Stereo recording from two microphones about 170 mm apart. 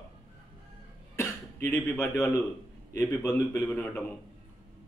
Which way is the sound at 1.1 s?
15° left (ahead or behind).